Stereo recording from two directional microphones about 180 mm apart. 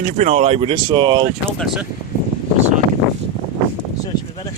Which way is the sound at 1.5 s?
Centre (ahead or behind).